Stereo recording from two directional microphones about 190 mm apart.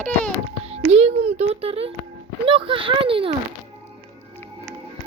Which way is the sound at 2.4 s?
25° right (ahead or behind).